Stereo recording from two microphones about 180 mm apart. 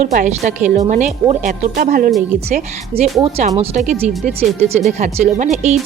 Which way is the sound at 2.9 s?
30° right (ahead or behind).